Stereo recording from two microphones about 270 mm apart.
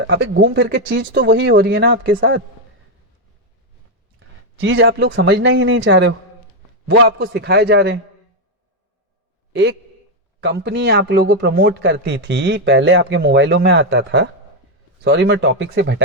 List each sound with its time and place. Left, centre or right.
0.1 s a man's voice: right
4.2 s a man's voice: right
9.5 s a man's voice: right